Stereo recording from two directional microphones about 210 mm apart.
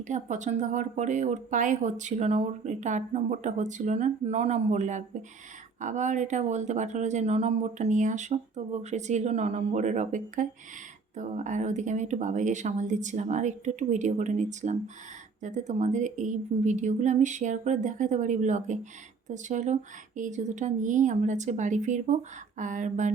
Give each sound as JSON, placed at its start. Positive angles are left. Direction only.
{"t": 0.1, "sound": "speech", "side_deg": -35}